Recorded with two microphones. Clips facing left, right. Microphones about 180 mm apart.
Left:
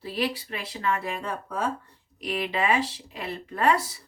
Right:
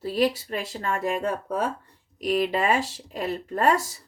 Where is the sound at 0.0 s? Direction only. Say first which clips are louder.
Right 6 dB; 40° right (ahead or behind).